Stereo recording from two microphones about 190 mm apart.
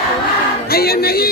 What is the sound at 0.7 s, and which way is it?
Music, 55° left (ahead or behind).